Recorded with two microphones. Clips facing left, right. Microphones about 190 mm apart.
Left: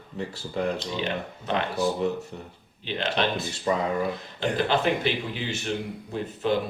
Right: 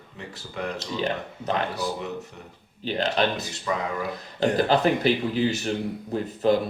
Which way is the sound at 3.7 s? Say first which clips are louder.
Left 3 dB; 30° left (ahead or behind).